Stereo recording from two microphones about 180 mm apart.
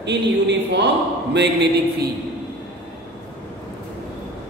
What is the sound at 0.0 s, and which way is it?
Speech, 70° right (ahead or behind).